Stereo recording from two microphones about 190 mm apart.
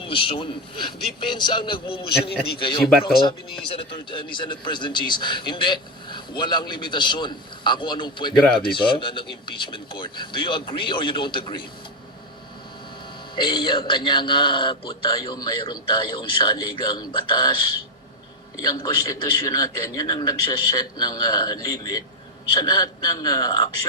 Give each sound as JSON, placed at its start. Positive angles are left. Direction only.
{"t": 0.0, "sound": "a man's voice", "side_deg": 25}
{"t": 13.3, "sound": "a man's voice", "side_deg": 25}